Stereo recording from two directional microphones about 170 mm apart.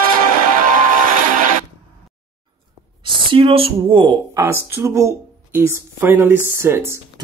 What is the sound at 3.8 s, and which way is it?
Speech, 30° right (ahead or behind).